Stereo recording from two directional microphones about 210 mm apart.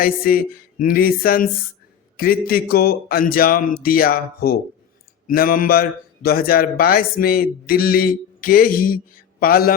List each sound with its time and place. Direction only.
0.0 s speech: 45° left (ahead or behind)